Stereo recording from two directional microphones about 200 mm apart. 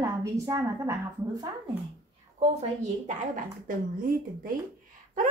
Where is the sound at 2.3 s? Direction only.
35° right (ahead or behind).